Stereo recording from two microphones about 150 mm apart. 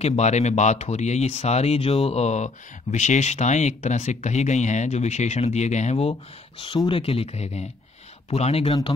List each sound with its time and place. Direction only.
0.0 s speech: 45° left (ahead or behind)
6.6 s speech: 35° left (ahead or behind)